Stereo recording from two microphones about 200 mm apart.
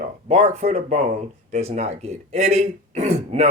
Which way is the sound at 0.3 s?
35° right (ahead or behind).